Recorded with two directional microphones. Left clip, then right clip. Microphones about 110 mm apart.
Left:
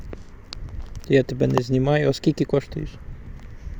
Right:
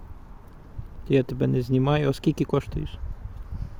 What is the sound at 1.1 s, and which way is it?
Speech, 15° right (ahead or behind).